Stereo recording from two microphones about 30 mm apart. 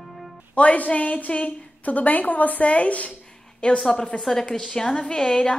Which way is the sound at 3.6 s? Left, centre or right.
Left.